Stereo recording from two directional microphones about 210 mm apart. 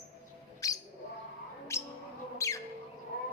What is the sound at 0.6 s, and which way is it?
Bird, 15° left (ahead or behind).